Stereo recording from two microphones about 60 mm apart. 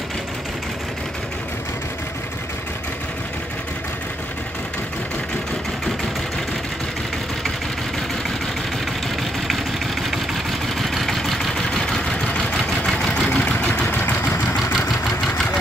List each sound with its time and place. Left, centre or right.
10.1 s engine: centre
12.9 s vehicle: centre
13.5 s vehicle: left